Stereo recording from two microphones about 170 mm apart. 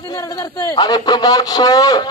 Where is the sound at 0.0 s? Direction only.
20° left (ahead or behind).